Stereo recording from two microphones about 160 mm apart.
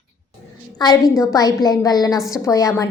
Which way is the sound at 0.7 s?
25° left (ahead or behind).